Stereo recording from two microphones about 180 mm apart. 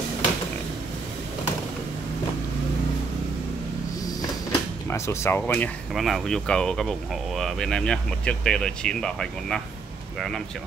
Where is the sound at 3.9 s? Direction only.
20° left (ahead or behind).